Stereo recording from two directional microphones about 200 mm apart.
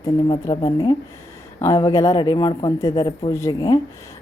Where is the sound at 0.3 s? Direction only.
25° left (ahead or behind).